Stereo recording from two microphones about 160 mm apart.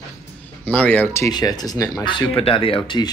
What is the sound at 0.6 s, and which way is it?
Speech, 10° left (ahead or behind).